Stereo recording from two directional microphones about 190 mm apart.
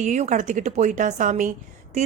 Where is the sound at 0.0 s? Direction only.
40° right (ahead or behind).